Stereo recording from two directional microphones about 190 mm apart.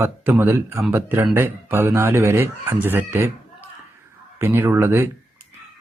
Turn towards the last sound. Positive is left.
turn(degrees=-15)  # may be behind; listen again after turning